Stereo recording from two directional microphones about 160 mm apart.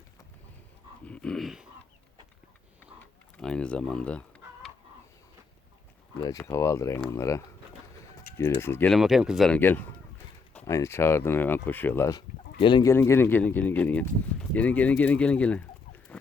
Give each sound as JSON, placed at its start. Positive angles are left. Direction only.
{"t": 1.0, "sound": "dog", "side_deg": 5}
{"t": 3.3, "sound": "a sound", "side_deg": 5}
{"t": 6.1, "sound": "speech", "side_deg": 20}
{"t": 8.9, "sound": "speech", "side_deg": 0}
{"t": 9.5, "sound": "speech", "side_deg": 10}
{"t": 12.5, "sound": "speech", "side_deg": 30}
{"t": 12.9, "sound": "speech", "side_deg": 15}